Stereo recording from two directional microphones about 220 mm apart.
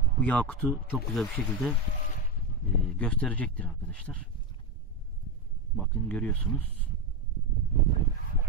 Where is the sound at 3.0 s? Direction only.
5° left (ahead or behind).